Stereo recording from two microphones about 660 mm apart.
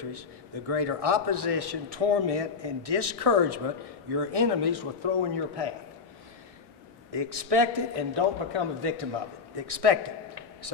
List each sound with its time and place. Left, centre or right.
0.7 s a man's voice: right
7.1 s a man's voice: right